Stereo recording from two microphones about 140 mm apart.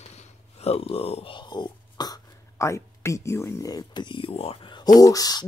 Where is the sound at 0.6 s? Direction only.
45° left (ahead or behind).